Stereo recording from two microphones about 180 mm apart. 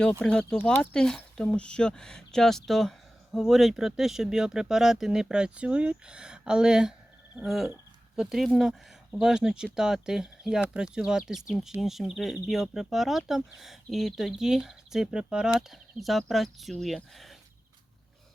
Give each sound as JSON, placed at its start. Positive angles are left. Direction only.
{"t": 0.2, "sound": "speech", "side_deg": 5}